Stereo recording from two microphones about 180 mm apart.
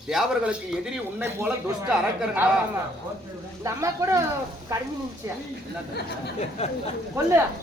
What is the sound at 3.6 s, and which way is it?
Speech, 15° right (ahead or behind).